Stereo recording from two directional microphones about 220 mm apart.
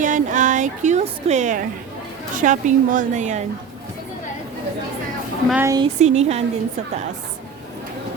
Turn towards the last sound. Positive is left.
turn(degrees=-30)  # may be behind; listen again after turning